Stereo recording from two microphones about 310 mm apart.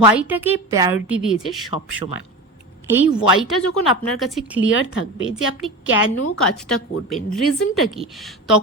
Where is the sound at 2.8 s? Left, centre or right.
Centre.